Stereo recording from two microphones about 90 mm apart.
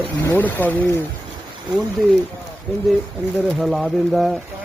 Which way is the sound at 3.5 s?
Centre (ahead or behind).